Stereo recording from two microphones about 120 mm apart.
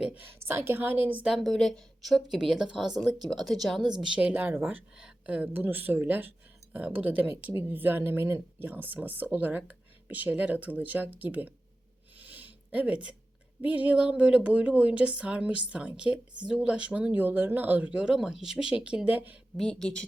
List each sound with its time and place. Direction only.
0.0 s a woman's voice: 15° right (ahead or behind)
12.2 s a sound: 15° right (ahead or behind)
13.6 s speech: 10° right (ahead or behind)
19.5 s a woman's voice: 5° left (ahead or behind)